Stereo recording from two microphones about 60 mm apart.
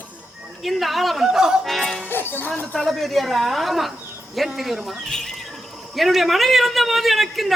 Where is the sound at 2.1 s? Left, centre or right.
Left.